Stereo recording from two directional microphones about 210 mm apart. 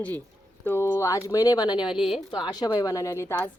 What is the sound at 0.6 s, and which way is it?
A woman's voice, 10° left (ahead or behind).